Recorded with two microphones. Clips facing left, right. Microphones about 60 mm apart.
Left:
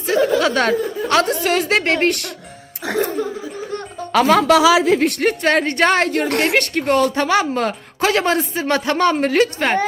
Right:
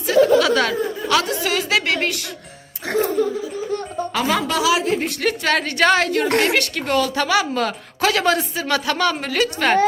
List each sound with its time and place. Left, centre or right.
0.1 s a woman's voice: left
4.1 s a woman's voice: left
5.2 s a woman's voice: left